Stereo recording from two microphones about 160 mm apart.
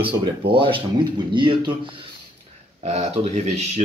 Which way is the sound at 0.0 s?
35° right (ahead or behind).